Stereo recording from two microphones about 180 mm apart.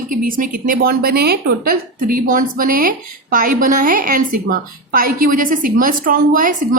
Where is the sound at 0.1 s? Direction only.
50° right (ahead or behind).